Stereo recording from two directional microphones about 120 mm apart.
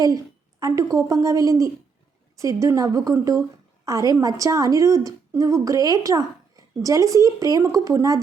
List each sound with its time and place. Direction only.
0.6 s a woman's voice: 25° right (ahead or behind)